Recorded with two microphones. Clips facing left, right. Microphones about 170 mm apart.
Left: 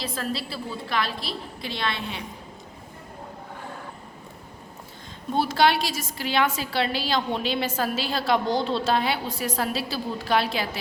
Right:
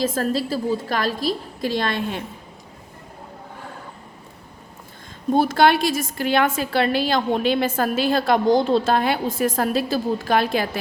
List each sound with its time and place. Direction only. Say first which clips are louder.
0.0 s a woman's voice: right 8 dB; 45° right (ahead or behind)
5.3 s a woman's voice: right 5 dB; 50° right (ahead or behind)